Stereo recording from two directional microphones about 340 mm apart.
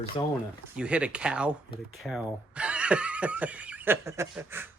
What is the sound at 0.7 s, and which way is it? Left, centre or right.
Speech, centre.